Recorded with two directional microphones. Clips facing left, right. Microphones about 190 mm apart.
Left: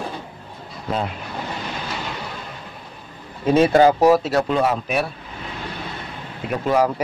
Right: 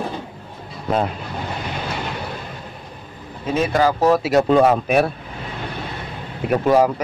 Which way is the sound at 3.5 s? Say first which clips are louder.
Left 4 dB; 30° left (ahead or behind).